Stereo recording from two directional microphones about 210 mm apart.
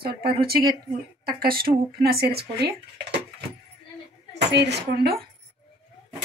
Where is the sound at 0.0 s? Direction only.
45° right (ahead or behind).